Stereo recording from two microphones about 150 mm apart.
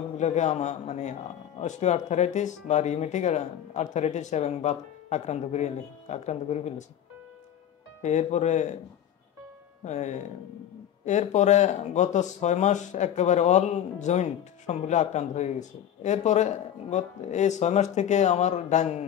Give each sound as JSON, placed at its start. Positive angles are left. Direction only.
{"t": 0.2, "sound": "speech", "side_deg": 50}
{"t": 8.0, "sound": "speech", "side_deg": 50}
{"t": 9.8, "sound": "speech", "side_deg": 50}